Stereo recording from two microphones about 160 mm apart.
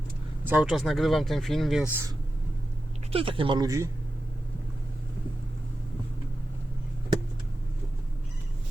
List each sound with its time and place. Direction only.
0.4 s speech: 5° right (ahead or behind)
3.1 s speech: 35° right (ahead or behind)